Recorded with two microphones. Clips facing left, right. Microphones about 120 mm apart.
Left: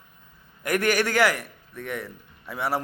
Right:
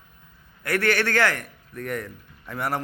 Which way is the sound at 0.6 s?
15° left (ahead or behind).